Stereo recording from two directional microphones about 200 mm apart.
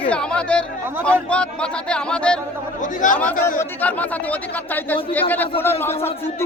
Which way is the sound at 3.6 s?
10° left (ahead or behind).